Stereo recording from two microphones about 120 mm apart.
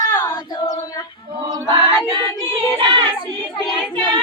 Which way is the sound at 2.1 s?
45° right (ahead or behind).